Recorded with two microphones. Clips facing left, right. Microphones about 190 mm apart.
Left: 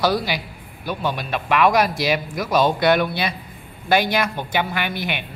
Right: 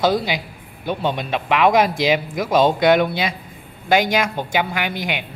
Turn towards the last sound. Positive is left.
turn(degrees=-15)  # may be behind; listen again after turning